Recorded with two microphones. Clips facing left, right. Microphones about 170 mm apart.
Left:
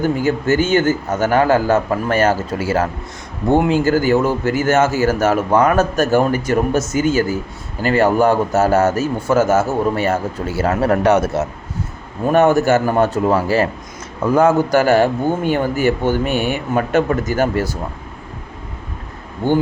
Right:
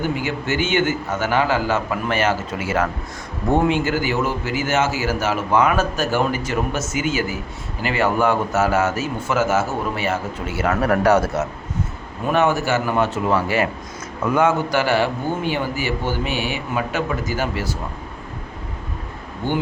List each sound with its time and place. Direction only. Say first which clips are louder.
0.0 s a man's voice: left 6 dB; 45° left (ahead or behind); by 11.4 s 25° left (ahead or behind)
12.3 s a man's voice: left 6 dB; 50° left (ahead or behind)
12.9 s a man's voice: left 4 dB; 35° left (ahead or behind)